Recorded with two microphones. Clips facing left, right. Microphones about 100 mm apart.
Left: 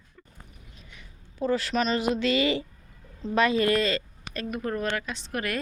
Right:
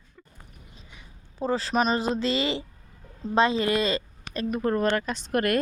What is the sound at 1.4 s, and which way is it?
A woman's voice, 30° right (ahead or behind).